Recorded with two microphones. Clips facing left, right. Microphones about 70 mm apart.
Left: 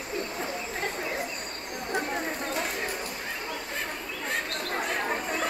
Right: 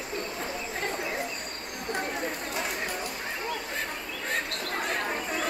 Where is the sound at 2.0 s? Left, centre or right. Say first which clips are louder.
Left 2 dB; left.